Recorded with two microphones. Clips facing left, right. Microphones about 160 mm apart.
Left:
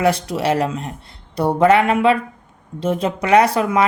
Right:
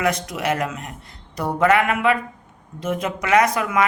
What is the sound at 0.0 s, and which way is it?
Speech, 30° left (ahead or behind).